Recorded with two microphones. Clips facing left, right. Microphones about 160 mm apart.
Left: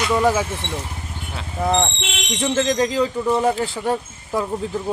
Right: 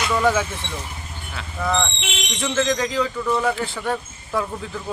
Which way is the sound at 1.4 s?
30° left (ahead or behind).